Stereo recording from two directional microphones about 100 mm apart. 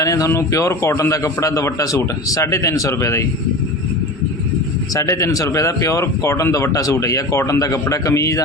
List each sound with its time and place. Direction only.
0.0 s speech: 35° left (ahead or behind)
4.9 s speech: 30° left (ahead or behind)